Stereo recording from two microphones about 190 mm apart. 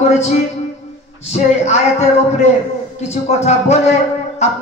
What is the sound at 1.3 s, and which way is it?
Speech, 35° left (ahead or behind).